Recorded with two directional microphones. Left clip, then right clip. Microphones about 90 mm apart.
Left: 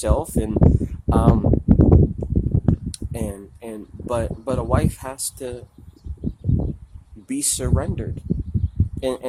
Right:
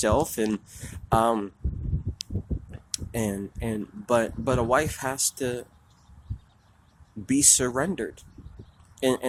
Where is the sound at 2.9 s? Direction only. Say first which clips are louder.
Even; 10° left (ahead or behind).